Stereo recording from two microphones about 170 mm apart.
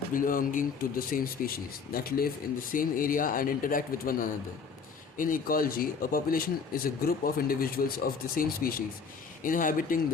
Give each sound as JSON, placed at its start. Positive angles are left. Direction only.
{"t": 0.1, "sound": "a man's voice", "side_deg": 55}